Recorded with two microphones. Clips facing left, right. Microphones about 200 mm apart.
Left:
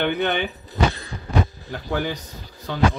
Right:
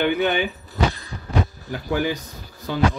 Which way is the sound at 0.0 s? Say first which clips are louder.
Right 2 dB; 5° right (ahead or behind).